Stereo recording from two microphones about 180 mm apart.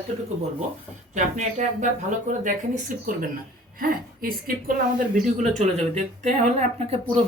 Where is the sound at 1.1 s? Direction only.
40° right (ahead or behind).